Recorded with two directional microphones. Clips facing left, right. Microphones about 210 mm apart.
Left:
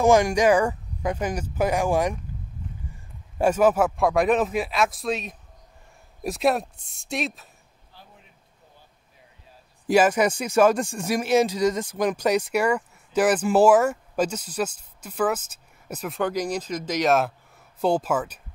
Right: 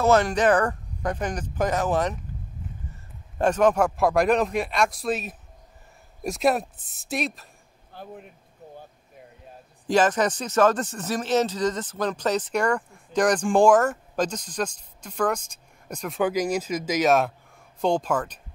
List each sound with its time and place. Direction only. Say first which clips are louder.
0.0 s speech: left 2 dB; 10° left (ahead or behind)
3.3 s speech: left 1 dB; 10° left (ahead or behind)
7.9 s a sound: right 12 dB; 55° right (ahead or behind)
9.8 s speech: left 2 dB; 10° left (ahead or behind)
16.2 s speech: right 2 dB; 5° right (ahead or behind)